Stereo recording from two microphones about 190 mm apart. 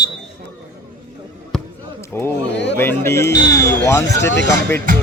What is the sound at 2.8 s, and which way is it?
Speech, 15° left (ahead or behind).